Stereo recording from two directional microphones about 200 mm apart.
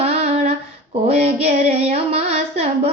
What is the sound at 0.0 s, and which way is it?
Female singing, 30° right (ahead or behind).